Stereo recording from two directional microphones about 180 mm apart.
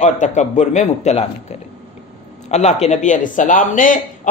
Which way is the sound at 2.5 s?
40° left (ahead or behind).